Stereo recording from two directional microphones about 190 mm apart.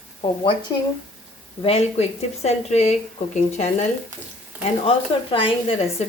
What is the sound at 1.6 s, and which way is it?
A woman's voice, 35° left (ahead or behind).